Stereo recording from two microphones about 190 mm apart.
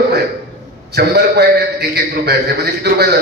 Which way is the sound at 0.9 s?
60° right (ahead or behind).